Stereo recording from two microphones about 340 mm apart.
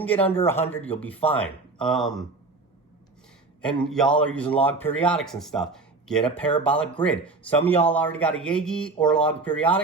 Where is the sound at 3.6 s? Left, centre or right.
Centre.